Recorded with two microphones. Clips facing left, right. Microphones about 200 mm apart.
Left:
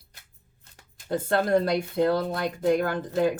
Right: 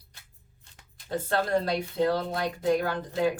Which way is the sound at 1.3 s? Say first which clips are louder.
Left 4 dB; 50° left (ahead or behind).